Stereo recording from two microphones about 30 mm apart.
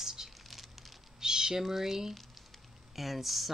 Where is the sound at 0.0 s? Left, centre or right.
Centre.